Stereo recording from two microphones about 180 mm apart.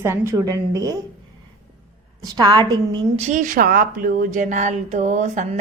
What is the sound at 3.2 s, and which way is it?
A woman's voice, 40° right (ahead or behind).